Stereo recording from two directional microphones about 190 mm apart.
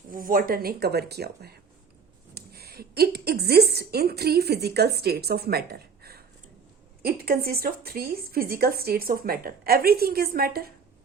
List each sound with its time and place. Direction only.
0.1 s a woman's voice: 45° right (ahead or behind)